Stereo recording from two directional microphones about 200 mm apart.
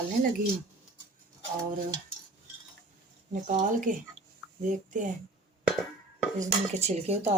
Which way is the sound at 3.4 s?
40° right (ahead or behind).